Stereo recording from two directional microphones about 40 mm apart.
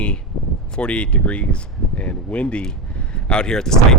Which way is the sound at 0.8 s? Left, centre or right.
Left.